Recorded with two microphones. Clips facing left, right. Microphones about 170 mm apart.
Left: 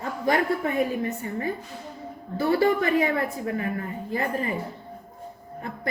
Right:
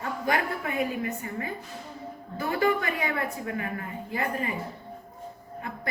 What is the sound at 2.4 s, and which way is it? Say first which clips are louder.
A woman's voice: left 4 dB; 35° left (ahead or behind).